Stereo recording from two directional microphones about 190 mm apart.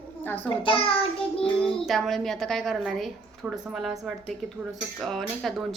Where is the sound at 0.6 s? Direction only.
30° left (ahead or behind).